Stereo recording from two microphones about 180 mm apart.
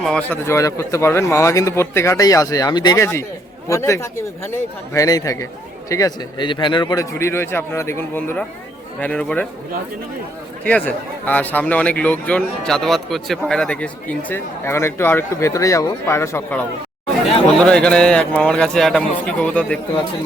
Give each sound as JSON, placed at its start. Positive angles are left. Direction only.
{"t": 0.0, "sound": "a man's voice", "side_deg": 5}
{"t": 10.6, "sound": "a man's voice", "side_deg": 5}